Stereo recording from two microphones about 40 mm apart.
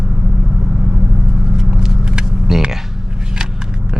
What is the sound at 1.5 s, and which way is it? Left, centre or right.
Vehicle, centre.